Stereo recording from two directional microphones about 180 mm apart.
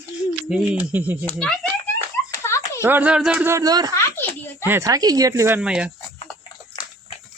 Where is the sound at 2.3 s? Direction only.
15° left (ahead or behind).